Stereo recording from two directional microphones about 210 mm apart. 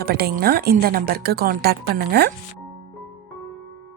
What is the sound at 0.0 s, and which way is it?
A woman's voice, 45° right (ahead or behind).